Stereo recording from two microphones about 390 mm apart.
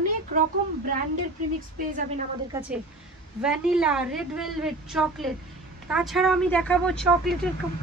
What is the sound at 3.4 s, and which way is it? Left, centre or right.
A woman's voice, centre.